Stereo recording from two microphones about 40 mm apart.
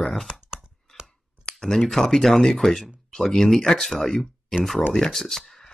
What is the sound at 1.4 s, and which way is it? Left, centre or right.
Clicking, centre.